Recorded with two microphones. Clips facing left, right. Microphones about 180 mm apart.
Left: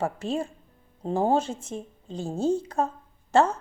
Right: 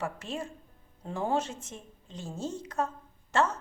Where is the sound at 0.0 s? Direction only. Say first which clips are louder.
Left 7 dB; 35° left (ahead or behind).